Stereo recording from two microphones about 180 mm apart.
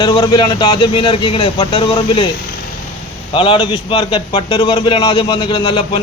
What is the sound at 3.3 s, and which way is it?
A man's voice, 30° left (ahead or behind).